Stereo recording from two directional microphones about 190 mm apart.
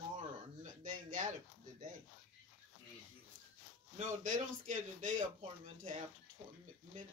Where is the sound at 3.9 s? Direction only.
40° right (ahead or behind).